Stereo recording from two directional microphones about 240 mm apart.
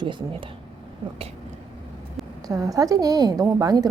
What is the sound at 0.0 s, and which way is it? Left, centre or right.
Speech, centre.